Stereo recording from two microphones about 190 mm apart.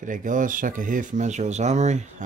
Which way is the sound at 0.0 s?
45° right (ahead or behind).